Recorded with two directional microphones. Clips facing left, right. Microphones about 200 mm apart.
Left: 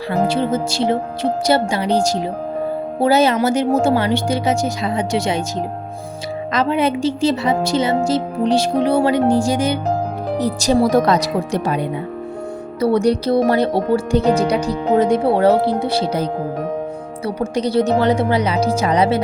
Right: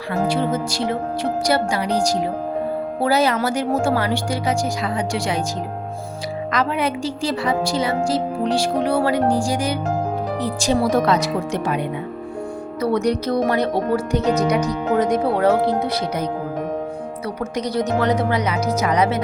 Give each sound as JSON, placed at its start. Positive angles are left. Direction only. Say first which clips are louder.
{"t": 0.1, "sound": "a woman's voice", "louder": "left 2 dB", "side_deg": 25}
{"t": 6.5, "sound": "a woman's voice", "louder": "left 5 dB", "side_deg": 25}
{"t": 10.3, "sound": "a woman's voice", "louder": "left 6 dB", "side_deg": 40}